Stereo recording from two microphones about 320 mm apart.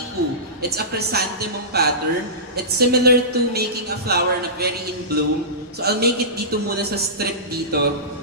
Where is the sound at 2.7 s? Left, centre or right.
Right.